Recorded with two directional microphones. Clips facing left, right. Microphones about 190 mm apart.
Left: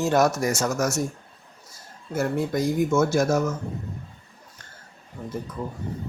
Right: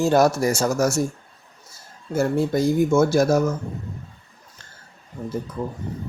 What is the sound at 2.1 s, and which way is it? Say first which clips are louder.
Speech: right 4 dB; 30° right (ahead or behind).